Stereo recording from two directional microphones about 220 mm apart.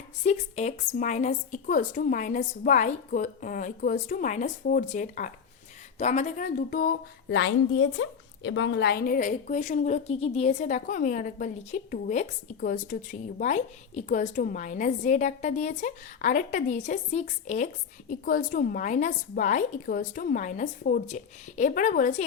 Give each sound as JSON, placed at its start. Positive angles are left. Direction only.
{"t": 0.3, "sound": "speech", "side_deg": 30}